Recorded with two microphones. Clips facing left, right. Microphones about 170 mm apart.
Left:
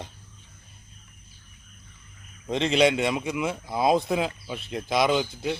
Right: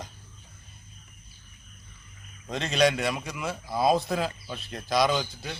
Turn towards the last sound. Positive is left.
turn(degrees=20)  # may be behind; listen again after turning